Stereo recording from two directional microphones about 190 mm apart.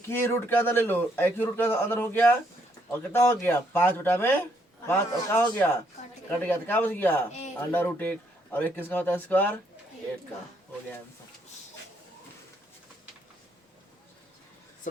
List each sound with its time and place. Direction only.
0.1 s a man's voice: 10° left (ahead or behind)
7.3 s speech: 35° left (ahead or behind)
7.7 s a man's voice: 10° left (ahead or behind)